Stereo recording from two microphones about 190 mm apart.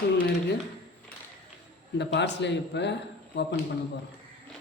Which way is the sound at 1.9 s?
65° left (ahead or behind).